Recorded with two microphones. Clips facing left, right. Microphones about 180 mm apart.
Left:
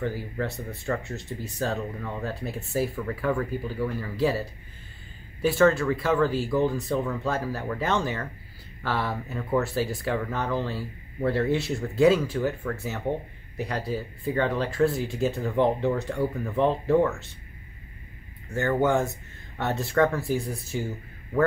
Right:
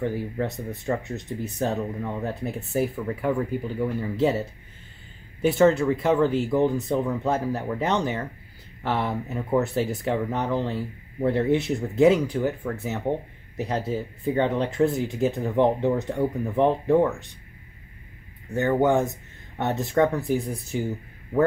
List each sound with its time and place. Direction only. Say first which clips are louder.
0.0 s speech: right 3 dB; 20° right (ahead or behind)
18.5 s speech: right 3 dB; 15° right (ahead or behind)